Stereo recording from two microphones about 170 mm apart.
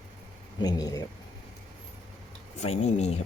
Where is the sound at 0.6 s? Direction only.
20° left (ahead or behind).